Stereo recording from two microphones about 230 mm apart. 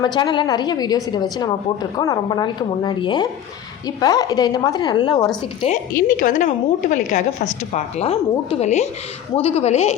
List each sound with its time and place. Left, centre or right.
0.0 s a woman's voice: centre
5.6 s a woman's voice: left